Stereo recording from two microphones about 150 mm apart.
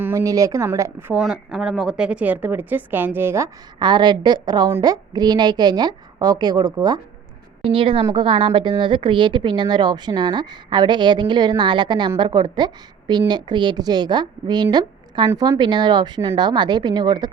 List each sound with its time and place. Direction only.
0.0 s speech: 20° right (ahead or behind)
1.2 s speech: 5° right (ahead or behind)
3.8 s a woman's voice: 30° right (ahead or behind)